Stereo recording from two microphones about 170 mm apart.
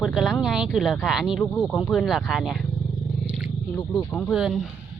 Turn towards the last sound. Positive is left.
turn(degrees=0)  # may be behind; listen again after turning